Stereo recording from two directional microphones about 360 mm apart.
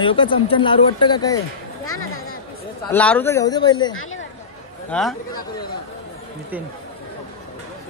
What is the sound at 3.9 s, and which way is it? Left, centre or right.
Speech, left.